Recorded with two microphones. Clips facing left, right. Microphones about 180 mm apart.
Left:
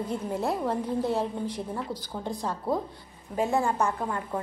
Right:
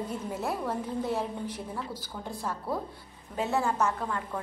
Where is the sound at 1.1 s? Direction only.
15° left (ahead or behind).